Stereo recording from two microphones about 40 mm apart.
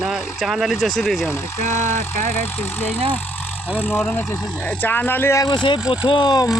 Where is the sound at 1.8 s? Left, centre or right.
Left.